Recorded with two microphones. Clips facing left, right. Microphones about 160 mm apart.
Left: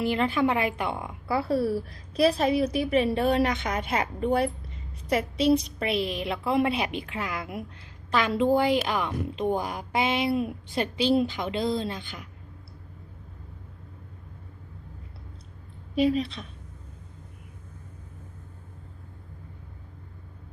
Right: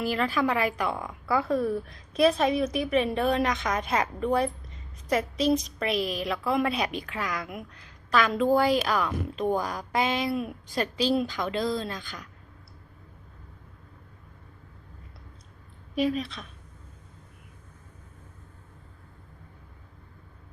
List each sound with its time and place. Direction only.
0.0 s a woman's voice: 25° left (ahead or behind)
16.0 s a woman's voice: 30° left (ahead or behind)